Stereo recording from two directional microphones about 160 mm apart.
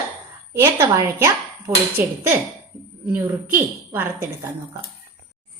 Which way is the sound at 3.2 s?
10° right (ahead or behind).